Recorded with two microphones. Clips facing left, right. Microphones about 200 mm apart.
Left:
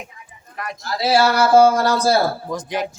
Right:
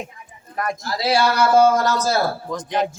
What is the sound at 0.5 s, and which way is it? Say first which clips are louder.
Speech: right 6 dB; 45° right (ahead or behind).